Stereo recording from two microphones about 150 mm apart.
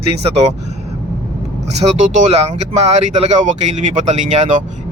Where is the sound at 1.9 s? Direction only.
50° right (ahead or behind).